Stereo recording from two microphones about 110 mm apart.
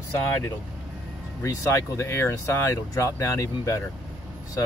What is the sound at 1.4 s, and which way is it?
Speech, 25° left (ahead or behind).